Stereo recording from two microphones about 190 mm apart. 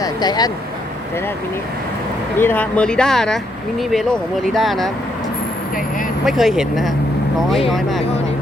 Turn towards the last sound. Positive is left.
turn(degrees=0)  # may be behind; listen again after turning